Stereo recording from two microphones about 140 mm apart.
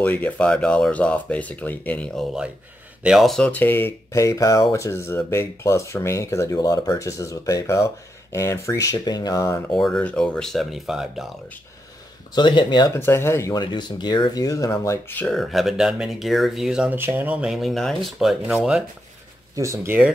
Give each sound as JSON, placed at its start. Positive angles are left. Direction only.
{"t": 0.0, "sound": "speech", "side_deg": 10}
{"t": 3.0, "sound": "speech", "side_deg": -5}
{"t": 9.7, "sound": "speech", "side_deg": 0}
{"t": 12.4, "sound": "speech", "side_deg": 35}
{"t": 12.9, "sound": "speech", "side_deg": 15}
{"t": 15.1, "sound": "speech", "side_deg": 5}
{"t": 19.5, "sound": "speech", "side_deg": -20}